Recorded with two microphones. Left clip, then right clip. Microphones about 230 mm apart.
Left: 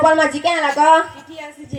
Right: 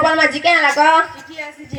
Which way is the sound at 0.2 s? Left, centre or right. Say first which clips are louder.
Right 3 dB; left.